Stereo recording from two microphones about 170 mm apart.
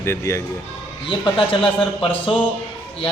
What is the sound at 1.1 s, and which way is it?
Speech, 30° left (ahead or behind).